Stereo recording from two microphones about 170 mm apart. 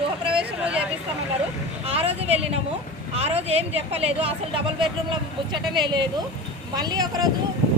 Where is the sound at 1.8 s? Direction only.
35° right (ahead or behind).